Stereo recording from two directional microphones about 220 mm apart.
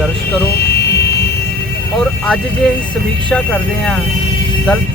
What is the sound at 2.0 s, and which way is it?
Speech, 5° left (ahead or behind).